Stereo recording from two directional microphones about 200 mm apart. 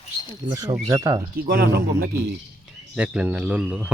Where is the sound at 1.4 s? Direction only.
50° right (ahead or behind).